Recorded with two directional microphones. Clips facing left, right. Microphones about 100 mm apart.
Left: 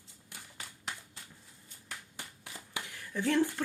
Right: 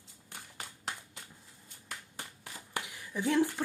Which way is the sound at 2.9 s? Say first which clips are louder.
Left 1 dB; 15° right (ahead or behind).